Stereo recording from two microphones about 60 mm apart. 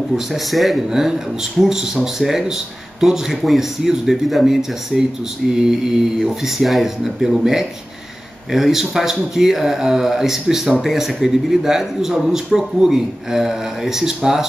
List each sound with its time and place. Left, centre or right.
0.1 s a man's voice: centre